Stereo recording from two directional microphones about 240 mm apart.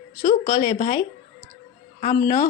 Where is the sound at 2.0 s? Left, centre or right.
Left.